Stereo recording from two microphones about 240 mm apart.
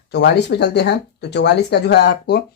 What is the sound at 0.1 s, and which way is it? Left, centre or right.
Speech, left.